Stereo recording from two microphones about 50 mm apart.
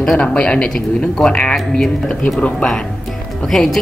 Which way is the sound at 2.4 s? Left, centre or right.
Left.